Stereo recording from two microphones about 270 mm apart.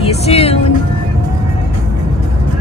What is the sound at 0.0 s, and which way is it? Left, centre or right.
Music, left.